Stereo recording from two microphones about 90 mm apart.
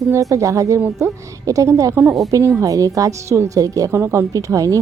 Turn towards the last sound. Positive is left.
turn(degrees=-40)  # may be behind; listen again after turning